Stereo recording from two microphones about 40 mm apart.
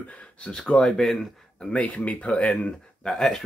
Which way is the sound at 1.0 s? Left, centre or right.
Centre.